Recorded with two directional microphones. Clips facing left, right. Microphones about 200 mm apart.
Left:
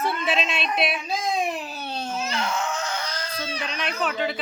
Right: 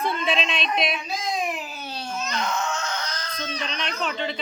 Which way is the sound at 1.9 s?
45° left (ahead or behind).